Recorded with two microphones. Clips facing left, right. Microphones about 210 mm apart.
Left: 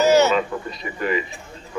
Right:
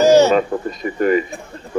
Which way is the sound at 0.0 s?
35° right (ahead or behind).